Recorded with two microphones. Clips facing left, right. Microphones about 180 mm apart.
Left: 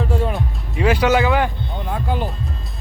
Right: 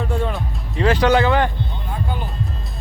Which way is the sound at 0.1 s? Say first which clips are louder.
Left 2 dB; 5° left (ahead or behind).